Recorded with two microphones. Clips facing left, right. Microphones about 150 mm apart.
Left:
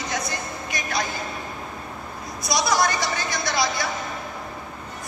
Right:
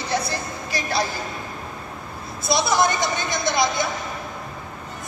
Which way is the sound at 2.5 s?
25° right (ahead or behind).